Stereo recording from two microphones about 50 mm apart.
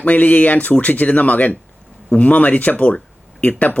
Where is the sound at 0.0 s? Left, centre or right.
Left.